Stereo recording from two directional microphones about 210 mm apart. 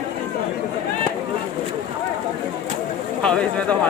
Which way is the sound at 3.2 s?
5° left (ahead or behind).